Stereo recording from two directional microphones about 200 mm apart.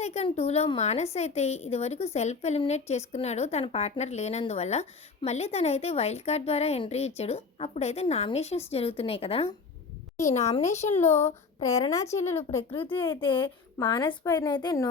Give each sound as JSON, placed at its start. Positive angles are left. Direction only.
{"t": 0.0, "sound": "a woman's voice", "side_deg": 35}
{"t": 11.6, "sound": "a woman's voice", "side_deg": 15}
{"t": 12.7, "sound": "a woman's voice", "side_deg": 25}